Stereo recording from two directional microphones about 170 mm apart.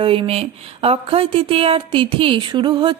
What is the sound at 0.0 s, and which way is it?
Speech, 35° right (ahead or behind).